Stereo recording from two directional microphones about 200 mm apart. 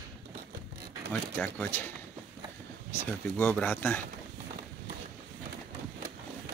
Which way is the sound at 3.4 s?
10° left (ahead or behind).